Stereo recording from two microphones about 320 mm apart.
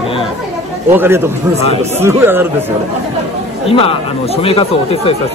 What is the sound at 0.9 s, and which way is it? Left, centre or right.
Speech, centre.